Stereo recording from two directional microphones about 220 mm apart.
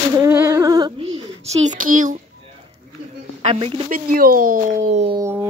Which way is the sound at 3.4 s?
25° right (ahead or behind).